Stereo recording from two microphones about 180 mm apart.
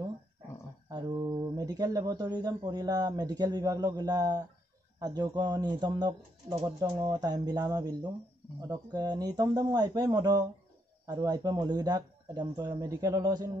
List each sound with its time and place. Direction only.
0.8 s speech: 20° right (ahead or behind)